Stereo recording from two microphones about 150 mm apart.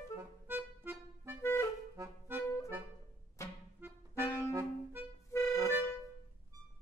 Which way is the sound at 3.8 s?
15° right (ahead or behind).